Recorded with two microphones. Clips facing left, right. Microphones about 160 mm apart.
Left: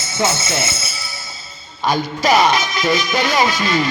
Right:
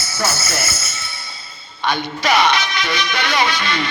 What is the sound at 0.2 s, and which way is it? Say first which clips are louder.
Speech: left 3 dB; 25° left (ahead or behind).